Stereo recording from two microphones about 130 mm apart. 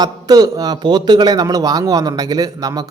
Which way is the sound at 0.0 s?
30° right (ahead or behind).